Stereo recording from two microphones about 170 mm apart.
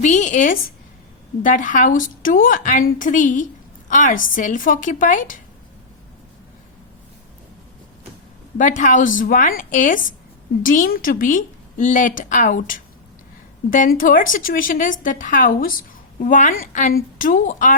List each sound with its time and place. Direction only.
0.0 s a woman's voice: 45° left (ahead or behind)
8.5 s a woman's voice: 45° left (ahead or behind)